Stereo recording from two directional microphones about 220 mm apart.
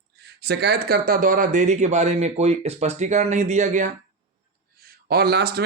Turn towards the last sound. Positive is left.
turn(degrees=-45)  # may be behind; listen again after turning